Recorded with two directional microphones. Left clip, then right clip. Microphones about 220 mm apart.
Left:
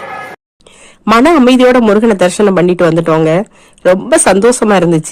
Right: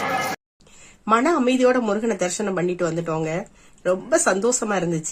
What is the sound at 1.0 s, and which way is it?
Speech, 40° left (ahead or behind).